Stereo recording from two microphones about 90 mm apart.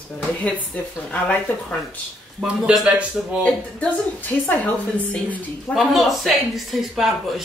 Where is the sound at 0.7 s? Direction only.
15° left (ahead or behind).